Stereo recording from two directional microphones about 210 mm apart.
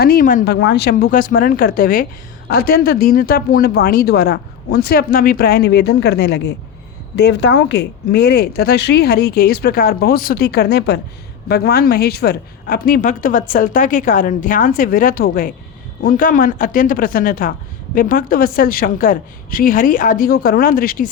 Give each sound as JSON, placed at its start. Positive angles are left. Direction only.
{"t": 0.0, "sound": "speech", "side_deg": 45}